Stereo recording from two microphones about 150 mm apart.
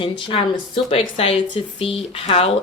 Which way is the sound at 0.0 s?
35° left (ahead or behind).